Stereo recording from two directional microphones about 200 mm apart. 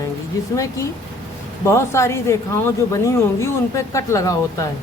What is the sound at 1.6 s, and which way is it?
Speech, 15° left (ahead or behind).